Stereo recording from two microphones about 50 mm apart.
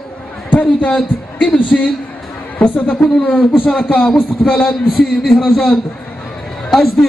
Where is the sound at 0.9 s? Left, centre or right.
Centre.